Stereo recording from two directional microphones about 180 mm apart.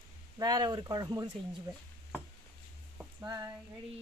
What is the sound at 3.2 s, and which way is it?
Speech, 20° right (ahead or behind).